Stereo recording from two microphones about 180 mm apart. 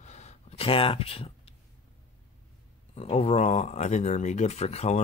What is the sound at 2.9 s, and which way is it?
Speech, 30° left (ahead or behind).